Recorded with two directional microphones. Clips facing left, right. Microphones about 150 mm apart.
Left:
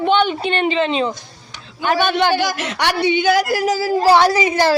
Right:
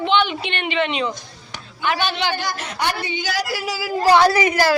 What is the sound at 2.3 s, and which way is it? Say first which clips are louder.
A woman's voice: left 7 dB; 90° left.